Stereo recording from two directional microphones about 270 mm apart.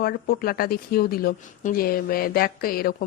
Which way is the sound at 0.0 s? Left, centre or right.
Left.